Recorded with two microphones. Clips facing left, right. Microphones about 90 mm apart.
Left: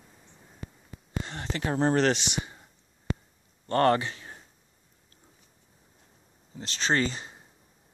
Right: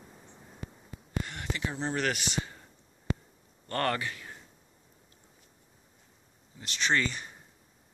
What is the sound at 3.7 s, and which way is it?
Speech, 25° left (ahead or behind).